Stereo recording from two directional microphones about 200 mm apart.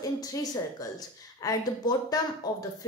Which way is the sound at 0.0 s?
15° left (ahead or behind).